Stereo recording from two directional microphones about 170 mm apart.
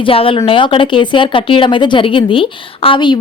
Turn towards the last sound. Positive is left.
turn(degrees=25)  # may be behind; listen again after turning